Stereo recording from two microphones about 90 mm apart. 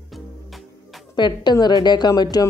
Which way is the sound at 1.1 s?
55° left (ahead or behind).